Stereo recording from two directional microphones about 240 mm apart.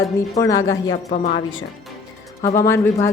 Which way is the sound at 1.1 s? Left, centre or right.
Left.